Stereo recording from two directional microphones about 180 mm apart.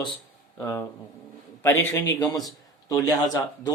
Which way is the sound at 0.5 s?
15° left (ahead or behind).